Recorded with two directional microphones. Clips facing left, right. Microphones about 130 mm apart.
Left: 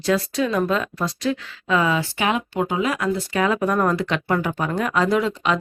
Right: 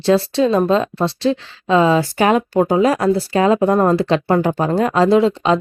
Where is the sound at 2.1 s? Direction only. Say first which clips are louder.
Right 8 dB; 40° right (ahead or behind).